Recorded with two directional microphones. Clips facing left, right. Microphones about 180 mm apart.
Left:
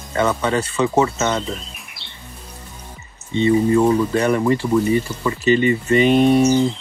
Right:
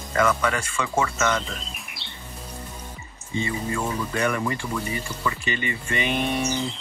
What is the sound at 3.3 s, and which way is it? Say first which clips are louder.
Speech: left 12 dB; 30° left (ahead or behind).